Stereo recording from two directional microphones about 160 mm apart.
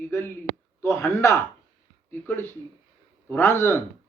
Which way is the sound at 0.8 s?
15° left (ahead or behind).